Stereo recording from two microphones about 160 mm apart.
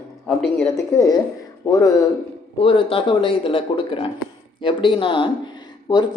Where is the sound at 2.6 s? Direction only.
35° left (ahead or behind).